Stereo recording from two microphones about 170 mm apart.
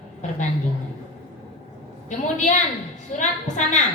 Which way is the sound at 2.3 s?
45° left (ahead or behind).